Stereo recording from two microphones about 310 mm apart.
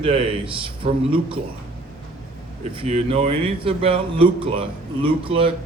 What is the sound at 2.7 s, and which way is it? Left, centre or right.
A man's voice, centre.